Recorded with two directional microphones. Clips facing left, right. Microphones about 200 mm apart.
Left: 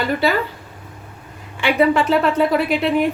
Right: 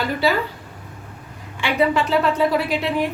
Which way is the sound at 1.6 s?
55° left (ahead or behind).